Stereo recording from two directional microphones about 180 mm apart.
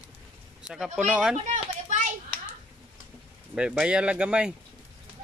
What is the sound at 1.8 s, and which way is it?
Hands, 40° right (ahead or behind).